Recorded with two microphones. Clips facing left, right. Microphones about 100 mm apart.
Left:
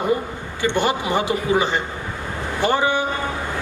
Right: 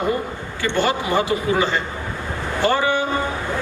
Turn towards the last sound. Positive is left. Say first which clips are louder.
# even
turn(degrees=20)  # may be behind; listen again after turning